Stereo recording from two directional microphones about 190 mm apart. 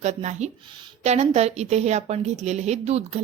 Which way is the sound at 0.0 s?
35° right (ahead or behind).